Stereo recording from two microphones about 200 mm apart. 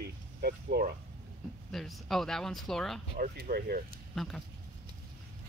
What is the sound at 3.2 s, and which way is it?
Speech, 45° right (ahead or behind).